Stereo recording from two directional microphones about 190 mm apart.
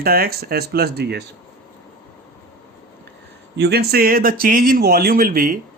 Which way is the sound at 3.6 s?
55° right (ahead or behind).